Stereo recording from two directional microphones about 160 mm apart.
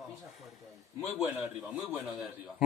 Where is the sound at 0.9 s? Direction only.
Centre (ahead or behind).